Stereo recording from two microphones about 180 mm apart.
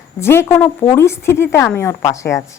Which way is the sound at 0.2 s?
15° left (ahead or behind).